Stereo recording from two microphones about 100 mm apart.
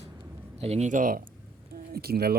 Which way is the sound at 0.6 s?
90° right.